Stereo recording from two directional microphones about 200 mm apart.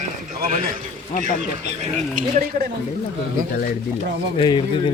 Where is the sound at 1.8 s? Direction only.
35° right (ahead or behind).